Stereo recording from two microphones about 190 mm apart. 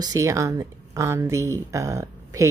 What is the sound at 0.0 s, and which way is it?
Speech, 15° right (ahead or behind).